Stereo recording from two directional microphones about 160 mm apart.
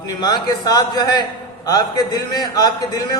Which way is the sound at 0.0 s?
25° left (ahead or behind).